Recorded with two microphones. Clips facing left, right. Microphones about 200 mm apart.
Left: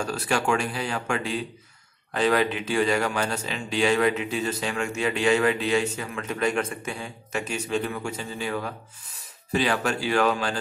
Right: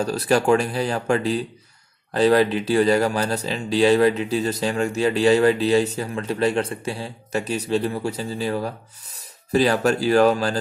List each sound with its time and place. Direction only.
0.0 s speech: 40° right (ahead or behind)